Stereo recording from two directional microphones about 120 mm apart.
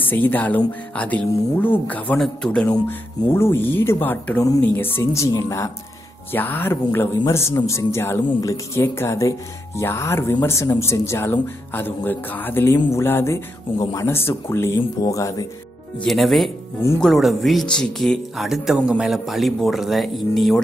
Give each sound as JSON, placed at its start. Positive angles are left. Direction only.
{"t": 0.0, "sound": "speech", "side_deg": 15}
{"t": 2.9, "sound": "speech", "side_deg": 20}
{"t": 16.0, "sound": "speech", "side_deg": 0}